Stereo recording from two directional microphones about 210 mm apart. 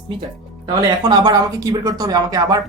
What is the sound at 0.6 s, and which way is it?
A woman's voice, 20° right (ahead or behind).